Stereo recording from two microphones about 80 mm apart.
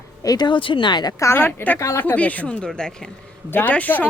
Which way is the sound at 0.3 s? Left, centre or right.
Left.